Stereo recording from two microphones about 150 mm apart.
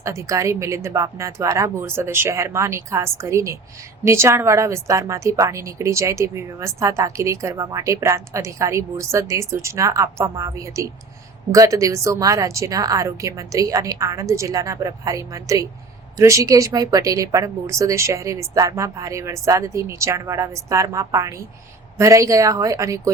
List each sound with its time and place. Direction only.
0.0 s a woman's voice: 20° right (ahead or behind)